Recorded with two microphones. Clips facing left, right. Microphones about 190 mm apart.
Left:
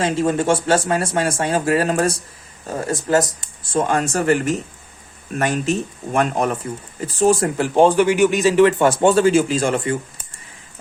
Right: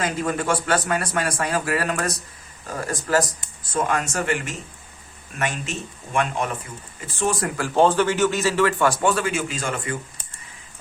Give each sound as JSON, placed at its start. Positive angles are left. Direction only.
{"t": 0.0, "sound": "speech", "side_deg": 25}